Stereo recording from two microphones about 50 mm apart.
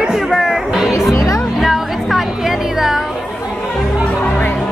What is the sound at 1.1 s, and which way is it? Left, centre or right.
Music, left.